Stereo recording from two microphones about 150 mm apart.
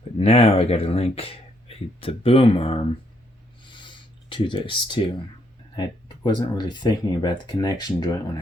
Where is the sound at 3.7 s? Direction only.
35° left (ahead or behind).